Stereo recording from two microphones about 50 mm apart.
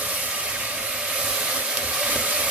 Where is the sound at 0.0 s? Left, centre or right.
Right.